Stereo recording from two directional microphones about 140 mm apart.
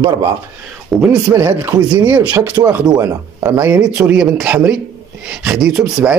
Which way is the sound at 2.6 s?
25° right (ahead or behind).